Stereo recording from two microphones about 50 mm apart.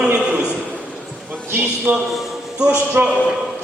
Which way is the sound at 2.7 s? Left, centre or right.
Right.